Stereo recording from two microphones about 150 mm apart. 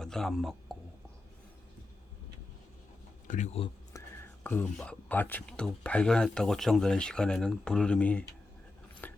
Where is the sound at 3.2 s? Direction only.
55° left (ahead or behind).